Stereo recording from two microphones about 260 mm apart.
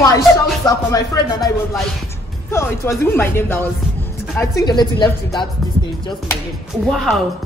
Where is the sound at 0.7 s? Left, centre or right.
Centre.